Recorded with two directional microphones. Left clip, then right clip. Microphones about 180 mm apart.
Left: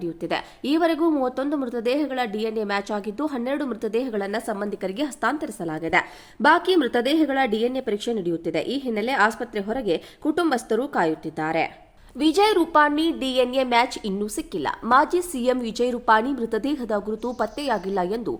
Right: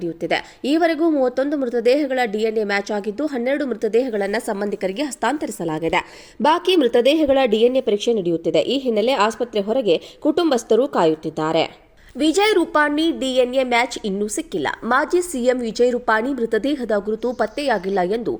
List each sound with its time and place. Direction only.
0.0 s a woman's voice: 10° right (ahead or behind)